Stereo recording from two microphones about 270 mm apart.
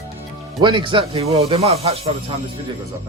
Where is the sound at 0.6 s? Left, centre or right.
Centre.